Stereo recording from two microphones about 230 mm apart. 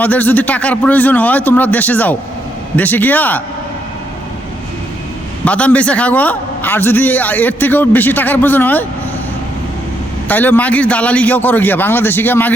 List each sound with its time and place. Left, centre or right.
0.0 s a man's voice: centre
5.5 s a man's voice: centre
10.2 s a man's voice: centre